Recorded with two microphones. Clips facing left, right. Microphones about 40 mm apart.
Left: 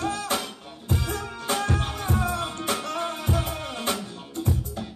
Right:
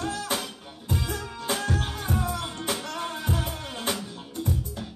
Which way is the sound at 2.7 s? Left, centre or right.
Centre.